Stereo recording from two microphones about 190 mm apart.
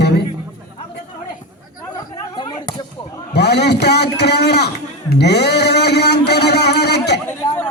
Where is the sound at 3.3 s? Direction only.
60° left (ahead or behind).